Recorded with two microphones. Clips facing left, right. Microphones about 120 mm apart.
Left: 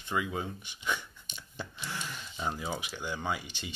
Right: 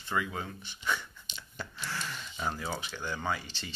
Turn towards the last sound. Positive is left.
turn(degrees=15)  # may be behind; listen again after turning